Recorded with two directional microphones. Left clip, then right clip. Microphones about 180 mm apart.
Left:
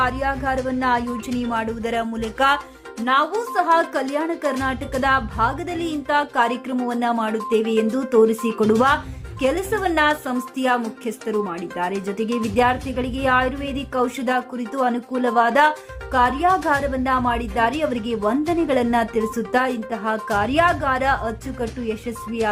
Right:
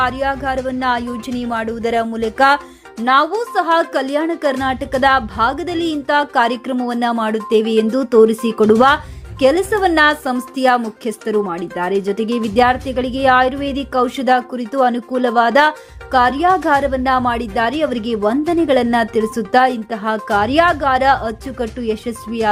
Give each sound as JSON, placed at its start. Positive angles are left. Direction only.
{"t": 0.0, "sound": "a woman's voice", "side_deg": -15}
{"t": 3.0, "sound": "speech", "side_deg": -35}
{"t": 3.5, "sound": "a woman's voice", "side_deg": -20}